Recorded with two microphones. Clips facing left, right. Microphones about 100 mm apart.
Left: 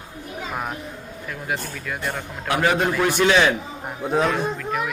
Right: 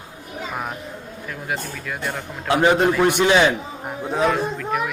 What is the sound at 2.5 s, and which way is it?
A man's voice, 20° right (ahead or behind).